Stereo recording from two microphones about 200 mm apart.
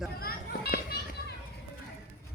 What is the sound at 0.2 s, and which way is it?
Children playing, 50° left (ahead or behind).